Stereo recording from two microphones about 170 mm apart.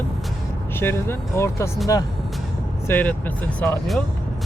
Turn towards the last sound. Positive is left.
turn(degrees=5)  # may be behind; listen again after turning